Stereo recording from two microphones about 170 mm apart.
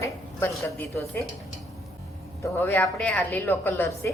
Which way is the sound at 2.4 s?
10° left (ahead or behind).